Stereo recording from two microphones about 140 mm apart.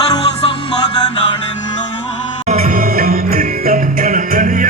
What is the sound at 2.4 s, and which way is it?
Music, 50° right (ahead or behind).